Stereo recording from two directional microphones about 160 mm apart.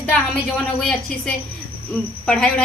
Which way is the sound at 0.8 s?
5° left (ahead or behind).